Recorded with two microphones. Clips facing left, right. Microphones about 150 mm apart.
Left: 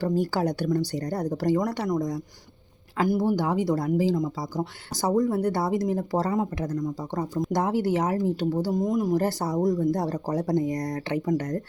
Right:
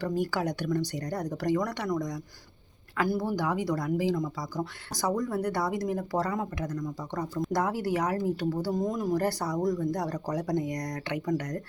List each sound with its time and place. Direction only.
0.0 s speech: 35° left (ahead or behind); by 9.0 s 15° left (ahead or behind)
9.1 s speech: 25° left (ahead or behind)